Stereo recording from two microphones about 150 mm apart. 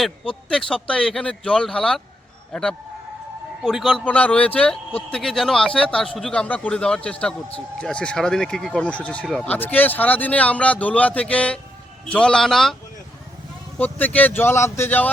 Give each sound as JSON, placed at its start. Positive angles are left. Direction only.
{"t": 0.0, "sound": "a man's voice", "side_deg": 5}
{"t": 4.0, "sound": "speech", "side_deg": 10}
{"t": 13.7, "sound": "speech", "side_deg": 10}